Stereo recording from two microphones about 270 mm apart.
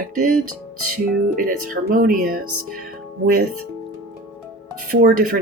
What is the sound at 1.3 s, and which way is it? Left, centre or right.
Speech, right.